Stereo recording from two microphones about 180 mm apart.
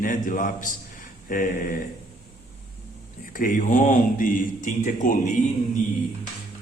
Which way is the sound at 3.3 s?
50° left (ahead or behind).